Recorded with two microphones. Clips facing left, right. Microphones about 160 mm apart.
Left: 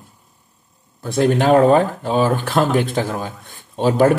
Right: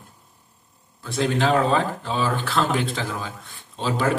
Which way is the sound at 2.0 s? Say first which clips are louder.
Left 7 dB; 45° left (ahead or behind).